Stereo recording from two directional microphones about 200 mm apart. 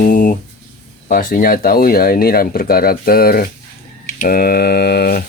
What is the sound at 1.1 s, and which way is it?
Speech, 45° left (ahead or behind).